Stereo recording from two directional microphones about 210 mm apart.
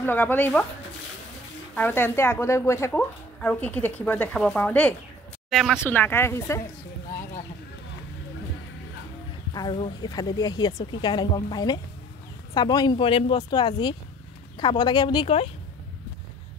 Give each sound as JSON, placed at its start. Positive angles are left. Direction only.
{"t": 0.0, "sound": "speech", "side_deg": 10}
{"t": 1.8, "sound": "speech", "side_deg": 10}
{"t": 9.5, "sound": "speech", "side_deg": 20}